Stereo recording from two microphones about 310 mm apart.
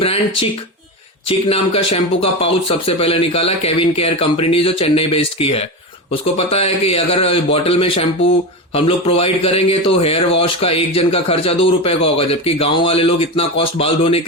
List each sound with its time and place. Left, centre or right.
0.0 s a man's voice: centre